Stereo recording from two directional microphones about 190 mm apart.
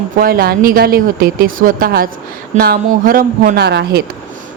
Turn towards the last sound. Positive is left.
turn(degrees=-60)  # may be behind; listen again after turning